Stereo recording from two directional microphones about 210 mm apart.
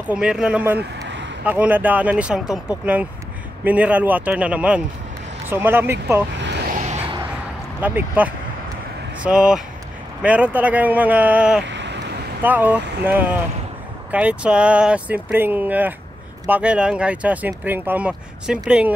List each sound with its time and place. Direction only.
0.0 s speech: 5° right (ahead or behind)
0.7 s vehicle: 60° right (ahead or behind)
1.4 s speech: 5° right (ahead or behind)
6.7 s a sound: 35° right (ahead or behind)
7.8 s speech: 10° right (ahead or behind)
11.7 s a sound: 55° right (ahead or behind)
12.4 s speech: 10° right (ahead or behind)